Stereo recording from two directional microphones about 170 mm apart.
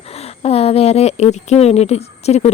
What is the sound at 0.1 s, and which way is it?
Speech, 35° left (ahead or behind).